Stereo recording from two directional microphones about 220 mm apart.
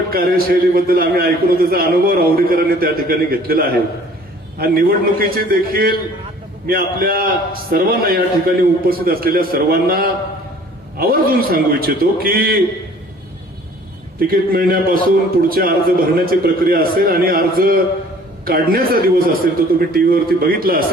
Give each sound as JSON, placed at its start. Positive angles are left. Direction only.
{"t": 0.1, "sound": "a man's voice", "side_deg": -40}
{"t": 14.2, "sound": "a man's voice", "side_deg": -40}